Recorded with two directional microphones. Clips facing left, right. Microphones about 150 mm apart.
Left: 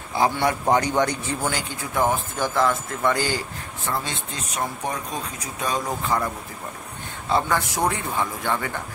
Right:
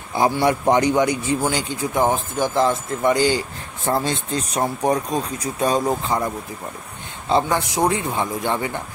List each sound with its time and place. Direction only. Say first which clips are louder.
0.2 s a man's voice: right 3 dB; 25° right (ahead or behind)
0.7 s a man's voice: right 4 dB; 15° right (ahead or behind)
3.8 s speech: right 7 dB; 35° right (ahead or behind)
6.0 s a man's voice: right 2 dB; 20° right (ahead or behind)